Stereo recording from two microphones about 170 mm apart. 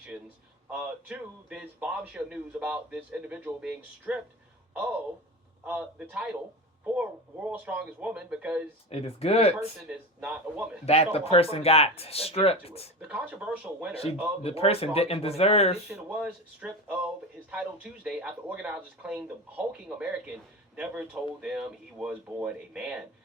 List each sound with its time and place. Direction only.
0.7 s a man's voice: 5° right (ahead or behind)
8.9 s speech: 35° left (ahead or behind)
10.2 s a man's voice: 5° right (ahead or behind)
10.8 s speech: 35° left (ahead or behind)
13.0 s a man's voice: 10° right (ahead or behind)
14.4 s speech: 35° left (ahead or behind)
15.9 s speech: 5° right (ahead or behind)